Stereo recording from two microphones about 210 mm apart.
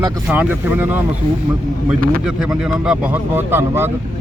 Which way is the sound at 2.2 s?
5° right (ahead or behind).